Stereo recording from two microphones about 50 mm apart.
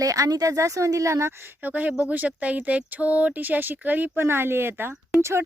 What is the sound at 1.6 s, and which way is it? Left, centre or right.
Speech, right.